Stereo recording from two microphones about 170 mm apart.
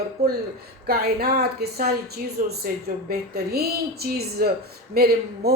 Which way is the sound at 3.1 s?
70° right (ahead or behind).